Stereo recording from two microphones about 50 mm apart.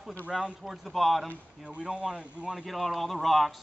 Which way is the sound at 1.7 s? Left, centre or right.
Right.